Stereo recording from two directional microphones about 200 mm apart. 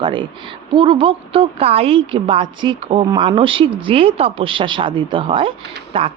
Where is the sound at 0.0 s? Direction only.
25° right (ahead or behind).